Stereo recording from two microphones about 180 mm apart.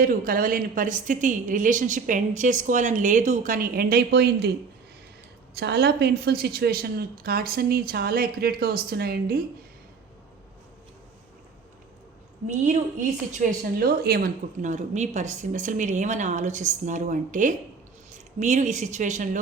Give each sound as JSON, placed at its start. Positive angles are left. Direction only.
{"t": 0.0, "sound": "a woman's voice", "side_deg": -50}
{"t": 5.5, "sound": "a woman's voice", "side_deg": -65}
{"t": 12.5, "sound": "a woman's voice", "side_deg": -45}
{"t": 14.6, "sound": "a woman's voice", "side_deg": -40}